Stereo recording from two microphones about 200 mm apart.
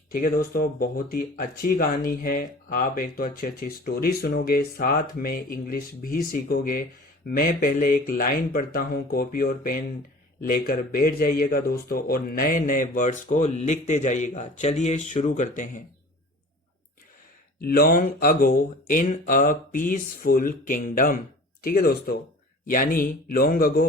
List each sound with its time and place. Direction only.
0.1 s speech: 45° left (ahead or behind)
17.6 s speech: 50° left (ahead or behind)